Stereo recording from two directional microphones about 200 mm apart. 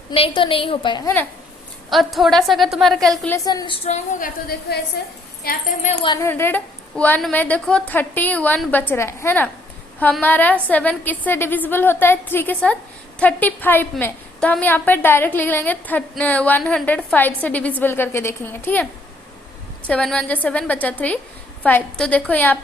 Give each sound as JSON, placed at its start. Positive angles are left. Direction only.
{"t": 0.1, "sound": "a woman's voice", "side_deg": 25}
{"t": 1.9, "sound": "a woman's voice", "side_deg": 0}
{"t": 3.3, "sound": "a woman's voice", "side_deg": 20}
{"t": 3.8, "sound": "a woman's voice", "side_deg": 35}
{"t": 5.0, "sound": "a woman's voice", "side_deg": 50}
{"t": 5.5, "sound": "a woman's voice", "side_deg": 40}
{"t": 6.1, "sound": "a woman's voice", "side_deg": 15}
{"t": 19.9, "sound": "a woman's voice", "side_deg": 5}